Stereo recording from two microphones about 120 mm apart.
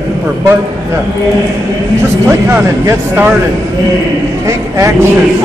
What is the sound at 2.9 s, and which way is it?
Speech, 20° right (ahead or behind).